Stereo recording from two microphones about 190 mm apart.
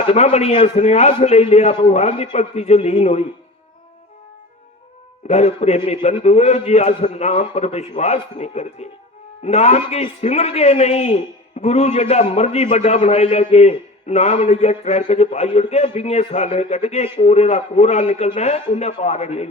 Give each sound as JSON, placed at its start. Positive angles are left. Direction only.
{"t": 0.1, "sound": "a man's voice", "side_deg": 35}
{"t": 5.3, "sound": "a man's voice", "side_deg": 35}